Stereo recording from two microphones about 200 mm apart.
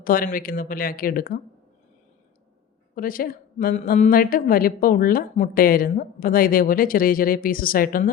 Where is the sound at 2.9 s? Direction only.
45° left (ahead or behind).